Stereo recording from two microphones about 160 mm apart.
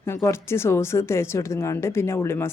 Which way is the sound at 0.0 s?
15° left (ahead or behind).